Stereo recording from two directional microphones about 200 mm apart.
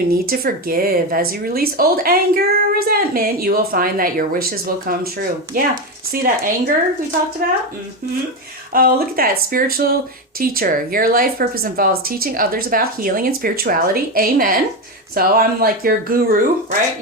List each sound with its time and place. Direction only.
0.1 s speech: 50° right (ahead or behind)
5.5 s speech: 45° right (ahead or behind)
8.7 s speech: 50° right (ahead or behind)